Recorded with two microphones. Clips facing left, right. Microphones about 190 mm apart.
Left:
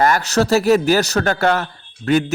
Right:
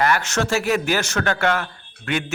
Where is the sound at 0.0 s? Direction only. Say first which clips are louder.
Left 5 dB; 40° left (ahead or behind).